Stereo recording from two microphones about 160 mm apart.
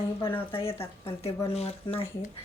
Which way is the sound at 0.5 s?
35° left (ahead or behind).